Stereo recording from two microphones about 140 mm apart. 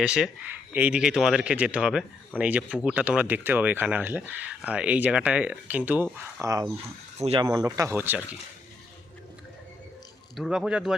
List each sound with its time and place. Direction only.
0.0 s speech: 5° right (ahead or behind)
6.4 s speech: 25° right (ahead or behind)
10.3 s speech: centre (ahead or behind)